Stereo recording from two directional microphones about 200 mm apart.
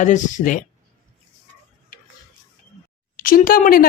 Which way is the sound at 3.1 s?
45° left (ahead or behind).